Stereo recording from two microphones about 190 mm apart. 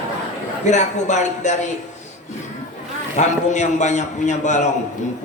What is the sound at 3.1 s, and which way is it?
A man's voice, 40° left (ahead or behind).